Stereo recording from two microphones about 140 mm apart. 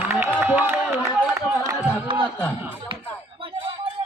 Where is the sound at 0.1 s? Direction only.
15° right (ahead or behind).